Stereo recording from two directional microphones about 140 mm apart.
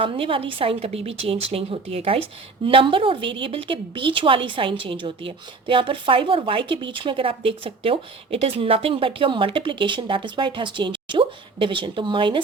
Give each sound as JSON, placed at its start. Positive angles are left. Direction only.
{"t": 0.0, "sound": "a woman's voice", "side_deg": -40}